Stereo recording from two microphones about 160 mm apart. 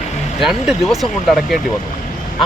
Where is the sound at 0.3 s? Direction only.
Centre (ahead or behind).